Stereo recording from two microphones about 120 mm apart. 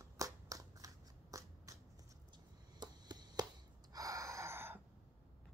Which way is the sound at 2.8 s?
35° right (ahead or behind).